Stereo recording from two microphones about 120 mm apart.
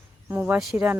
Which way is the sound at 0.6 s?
Centre (ahead or behind).